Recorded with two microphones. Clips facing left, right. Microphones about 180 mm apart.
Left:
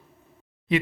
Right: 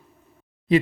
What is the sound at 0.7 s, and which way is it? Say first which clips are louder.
Speech: right 5 dB; 35° right (ahead or behind).